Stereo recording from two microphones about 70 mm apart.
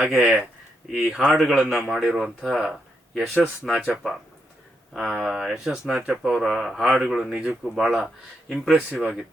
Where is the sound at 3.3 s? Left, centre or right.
Right.